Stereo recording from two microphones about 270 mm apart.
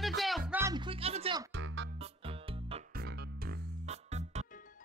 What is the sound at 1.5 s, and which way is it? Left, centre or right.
Music, right.